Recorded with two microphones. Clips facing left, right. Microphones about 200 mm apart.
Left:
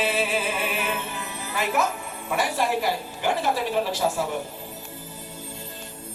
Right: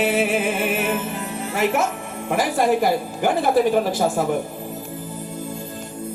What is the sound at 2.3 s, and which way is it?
A woman's voice, 50° right (ahead or behind).